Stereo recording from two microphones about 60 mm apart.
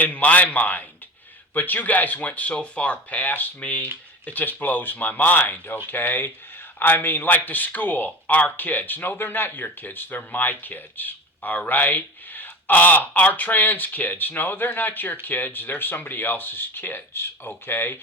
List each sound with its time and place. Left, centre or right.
0.0 s speech: left